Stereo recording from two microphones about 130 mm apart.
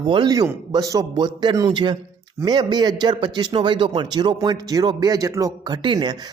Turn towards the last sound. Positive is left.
turn(degrees=-35)  # may be behind; listen again after turning